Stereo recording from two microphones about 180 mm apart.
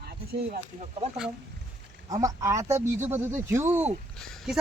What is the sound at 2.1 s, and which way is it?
Speech, 20° right (ahead or behind).